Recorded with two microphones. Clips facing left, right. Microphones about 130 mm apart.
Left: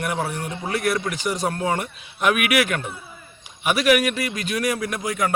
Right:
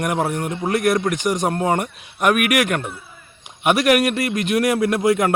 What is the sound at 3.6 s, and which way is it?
Speech, 65° right (ahead or behind).